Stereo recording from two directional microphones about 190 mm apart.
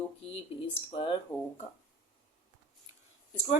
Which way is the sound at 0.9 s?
30° left (ahead or behind).